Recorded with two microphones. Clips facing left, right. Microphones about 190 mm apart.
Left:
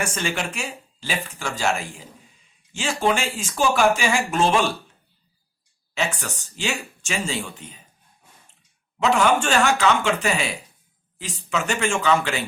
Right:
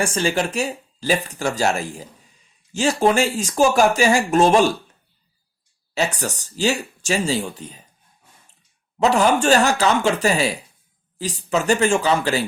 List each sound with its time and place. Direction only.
0.0 s speech: 30° right (ahead or behind)
5.9 s speech: 40° right (ahead or behind)
9.0 s speech: 35° right (ahead or behind)